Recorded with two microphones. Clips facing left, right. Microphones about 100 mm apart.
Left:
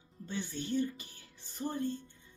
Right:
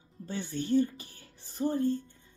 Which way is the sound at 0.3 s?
40° right (ahead or behind).